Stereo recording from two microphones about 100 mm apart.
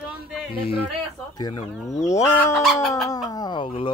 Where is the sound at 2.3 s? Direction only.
25° left (ahead or behind).